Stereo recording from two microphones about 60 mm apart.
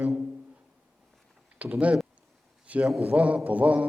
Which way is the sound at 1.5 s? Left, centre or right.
Right.